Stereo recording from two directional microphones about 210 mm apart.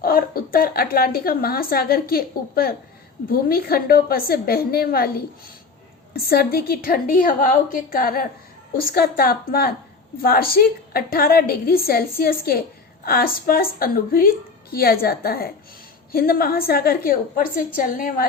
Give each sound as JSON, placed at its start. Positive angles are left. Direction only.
{"t": 0.0, "sound": "a woman's voice", "side_deg": 45}